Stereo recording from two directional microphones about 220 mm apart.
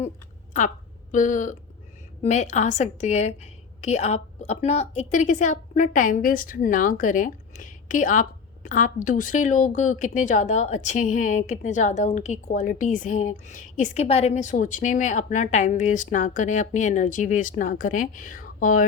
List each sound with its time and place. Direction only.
0.5 s a woman's voice: 35° left (ahead or behind)